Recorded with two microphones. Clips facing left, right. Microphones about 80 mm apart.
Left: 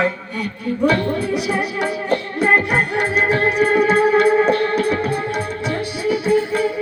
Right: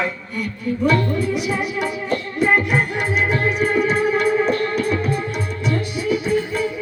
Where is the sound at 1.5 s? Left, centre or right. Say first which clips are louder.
Left 2 dB; left.